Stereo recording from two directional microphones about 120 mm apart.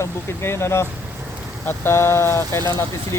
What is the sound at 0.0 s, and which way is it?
Speech, 20° left (ahead or behind).